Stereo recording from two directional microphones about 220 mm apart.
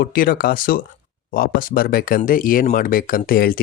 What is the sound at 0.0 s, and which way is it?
Speech, 40° left (ahead or behind).